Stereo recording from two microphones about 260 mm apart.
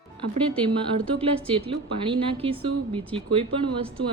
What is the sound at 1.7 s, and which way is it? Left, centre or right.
Speech, right.